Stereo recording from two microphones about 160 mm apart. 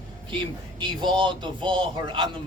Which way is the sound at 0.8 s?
30° right (ahead or behind).